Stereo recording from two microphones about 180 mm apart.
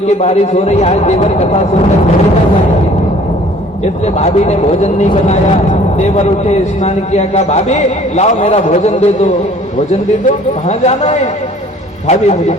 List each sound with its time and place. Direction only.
0.2 s a man's voice: 35° left (ahead or behind)
4.0 s a man's voice: 40° left (ahead or behind)